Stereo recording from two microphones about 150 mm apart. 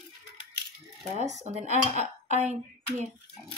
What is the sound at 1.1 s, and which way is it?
Speech, 50° right (ahead or behind).